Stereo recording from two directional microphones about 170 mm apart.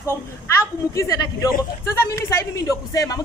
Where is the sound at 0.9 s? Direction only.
20° left (ahead or behind).